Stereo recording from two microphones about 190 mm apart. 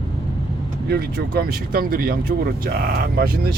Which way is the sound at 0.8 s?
55° right (ahead or behind).